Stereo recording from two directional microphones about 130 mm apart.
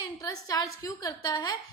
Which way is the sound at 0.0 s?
25° left (ahead or behind).